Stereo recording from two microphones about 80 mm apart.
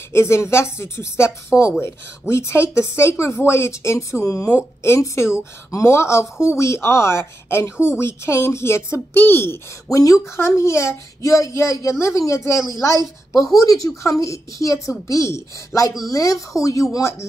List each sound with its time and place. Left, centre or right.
0.1 s speech: left
9.8 s speech: left
13.0 s a woman's voice: centre
13.6 s speech: left